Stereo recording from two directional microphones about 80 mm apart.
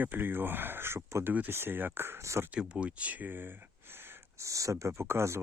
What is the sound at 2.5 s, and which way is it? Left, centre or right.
Speech, centre.